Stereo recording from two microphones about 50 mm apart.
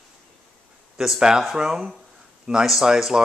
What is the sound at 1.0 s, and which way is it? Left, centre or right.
Speech, centre.